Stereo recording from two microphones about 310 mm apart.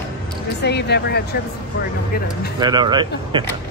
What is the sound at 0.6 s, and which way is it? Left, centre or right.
Speech, left.